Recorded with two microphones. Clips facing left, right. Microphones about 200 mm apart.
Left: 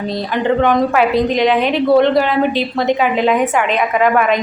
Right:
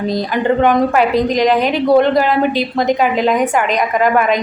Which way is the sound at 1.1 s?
40° right (ahead or behind).